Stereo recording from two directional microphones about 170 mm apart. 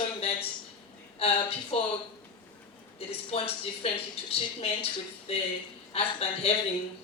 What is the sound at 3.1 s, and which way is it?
A woman's voice, 35° left (ahead or behind).